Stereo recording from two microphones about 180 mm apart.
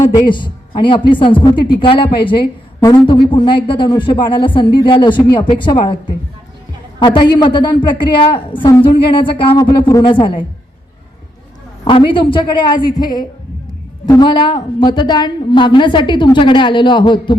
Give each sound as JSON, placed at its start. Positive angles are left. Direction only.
{"t": 0.3, "sound": "a woman's voice", "side_deg": 25}
{"t": 11.9, "sound": "a woman's voice", "side_deg": 30}